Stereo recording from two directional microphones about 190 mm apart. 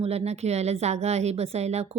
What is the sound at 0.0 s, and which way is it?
A woman's voice, 30° right (ahead or behind).